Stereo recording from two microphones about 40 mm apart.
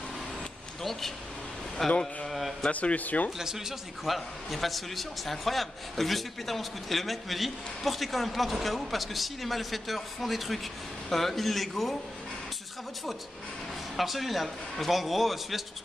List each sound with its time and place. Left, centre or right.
1.8 s a man's voice: centre
2.7 s speech: left
3.3 s a man's voice: centre
13.9 s a man's voice: centre